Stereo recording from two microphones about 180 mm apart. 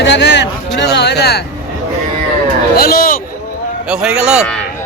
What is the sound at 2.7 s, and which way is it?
Speech, 60° left (ahead or behind).